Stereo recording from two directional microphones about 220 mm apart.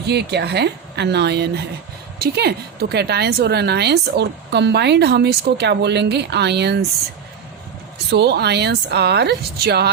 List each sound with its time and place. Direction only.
0.1 s a woman's voice: 50° right (ahead or behind)
7.9 s a woman's voice: 50° right (ahead or behind)